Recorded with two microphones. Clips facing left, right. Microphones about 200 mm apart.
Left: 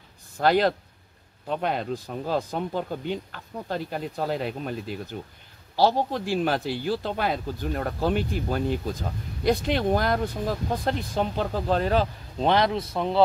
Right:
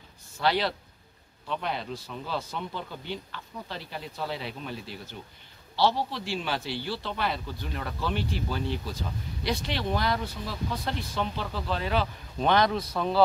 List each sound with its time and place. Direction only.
0.4 s speech: 45° left (ahead or behind)
12.4 s a man's voice: 25° left (ahead or behind)